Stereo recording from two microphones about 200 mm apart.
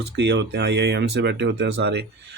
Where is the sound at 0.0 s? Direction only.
60° right (ahead or behind).